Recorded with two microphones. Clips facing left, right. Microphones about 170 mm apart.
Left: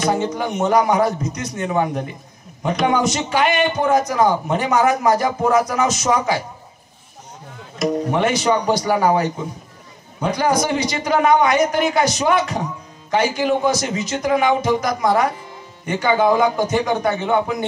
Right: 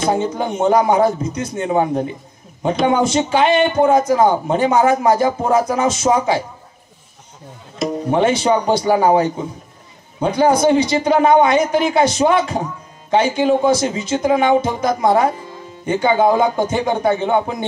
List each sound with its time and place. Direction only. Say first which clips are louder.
0.0 s a man's voice: right 2 dB; 30° right (ahead or behind)
7.8 s a man's voice: right 2 dB; 30° right (ahead or behind)